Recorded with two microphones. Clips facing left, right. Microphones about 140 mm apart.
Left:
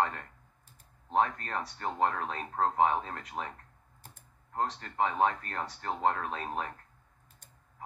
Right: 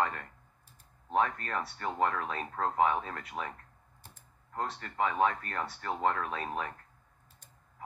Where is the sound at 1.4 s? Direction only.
50° right (ahead or behind).